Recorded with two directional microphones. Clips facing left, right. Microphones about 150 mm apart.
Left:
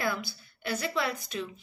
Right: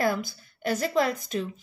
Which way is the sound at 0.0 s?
45° right (ahead or behind).